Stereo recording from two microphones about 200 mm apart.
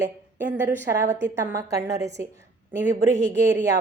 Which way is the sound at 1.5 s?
15° right (ahead or behind).